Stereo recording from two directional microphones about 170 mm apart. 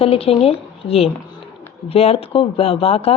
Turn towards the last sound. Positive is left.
turn(degrees=35)  # may be behind; listen again after turning